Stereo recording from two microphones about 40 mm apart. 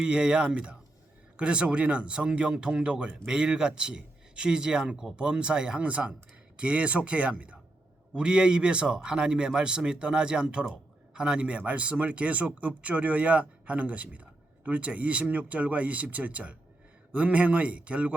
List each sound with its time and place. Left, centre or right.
0.0 s speech: centre
8.1 s a man's voice: right